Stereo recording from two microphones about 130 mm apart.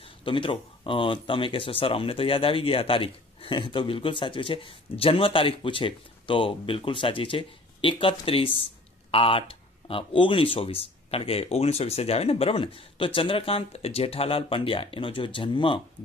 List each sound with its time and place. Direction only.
0.2 s speech: 40° left (ahead or behind)